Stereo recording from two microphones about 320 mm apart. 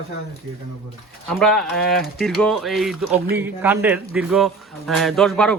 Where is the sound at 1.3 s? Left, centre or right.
Centre.